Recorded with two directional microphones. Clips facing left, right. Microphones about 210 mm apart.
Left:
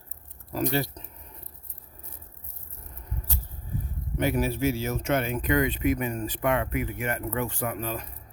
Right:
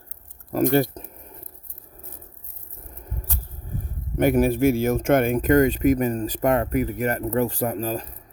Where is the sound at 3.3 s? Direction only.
55° right (ahead or behind).